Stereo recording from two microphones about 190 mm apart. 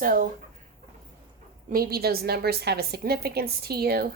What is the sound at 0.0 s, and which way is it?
Speech, 45° right (ahead or behind).